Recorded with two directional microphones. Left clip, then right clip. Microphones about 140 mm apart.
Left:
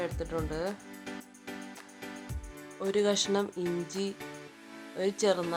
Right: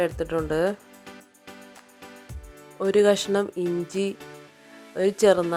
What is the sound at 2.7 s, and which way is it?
Speech, 40° right (ahead or behind).